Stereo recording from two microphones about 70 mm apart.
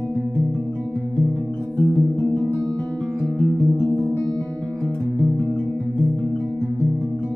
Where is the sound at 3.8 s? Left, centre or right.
Centre.